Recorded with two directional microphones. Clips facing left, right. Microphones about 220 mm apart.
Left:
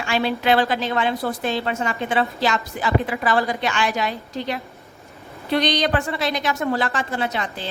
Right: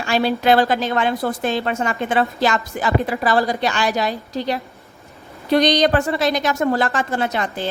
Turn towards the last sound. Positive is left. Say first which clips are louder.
# right 4 dB
turn(degrees=-50)  # may be behind; listen again after turning